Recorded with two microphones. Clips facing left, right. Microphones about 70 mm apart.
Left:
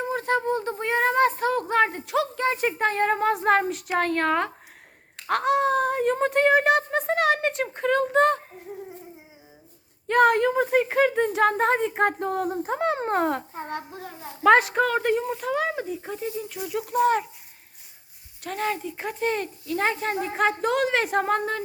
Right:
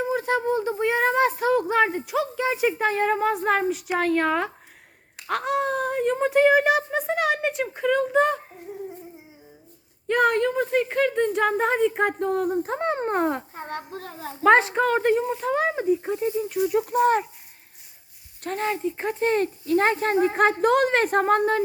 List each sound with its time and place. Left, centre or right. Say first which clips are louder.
0.0 s a sound: right 1 dB; centre
3.1 s speech: left 1 dB; centre
10.1 s speech: left 2 dB; centre
10.6 s speech: left 1 dB; centre
14.7 s speech: right 2 dB; centre
15.5 s speech: right 5 dB; right
18.6 s speech: right 2 dB; centre
19.2 s speech: right 4 dB; right
20.3 s a woman's voice: right 4 dB; right